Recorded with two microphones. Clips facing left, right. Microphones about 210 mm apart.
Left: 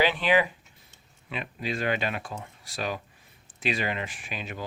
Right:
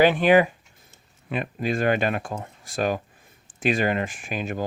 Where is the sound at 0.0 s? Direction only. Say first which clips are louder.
Right 7 dB; 50° right (ahead or behind).